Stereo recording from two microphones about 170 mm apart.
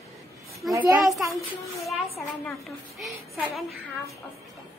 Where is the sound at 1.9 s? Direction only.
Centre (ahead or behind).